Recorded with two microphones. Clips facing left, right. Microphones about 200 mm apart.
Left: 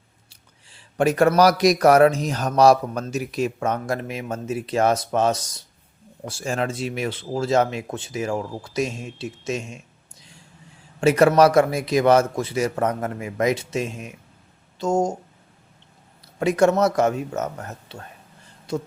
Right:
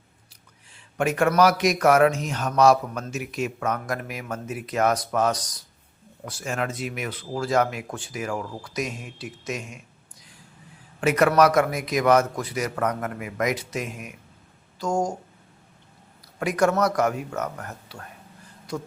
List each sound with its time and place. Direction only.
0.3 s a man's voice: 30° left (ahead or behind)
16.4 s speech: 25° left (ahead or behind)